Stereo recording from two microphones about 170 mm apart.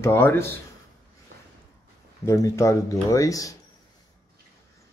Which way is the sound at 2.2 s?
20° left (ahead or behind).